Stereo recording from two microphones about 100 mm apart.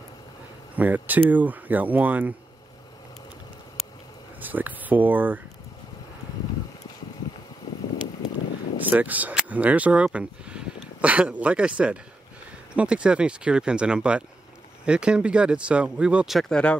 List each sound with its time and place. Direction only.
0.7 s speech: 15° right (ahead or behind)
4.4 s speech: 15° right (ahead or behind)
8.7 s speech: 15° right (ahead or behind)
16.3 s speech: 10° left (ahead or behind)